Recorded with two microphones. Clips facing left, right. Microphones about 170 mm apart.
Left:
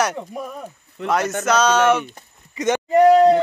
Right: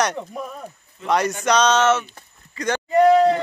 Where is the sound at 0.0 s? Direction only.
10° left (ahead or behind).